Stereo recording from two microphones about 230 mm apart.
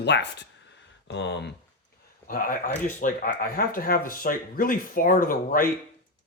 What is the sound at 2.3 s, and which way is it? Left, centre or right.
Speech, left.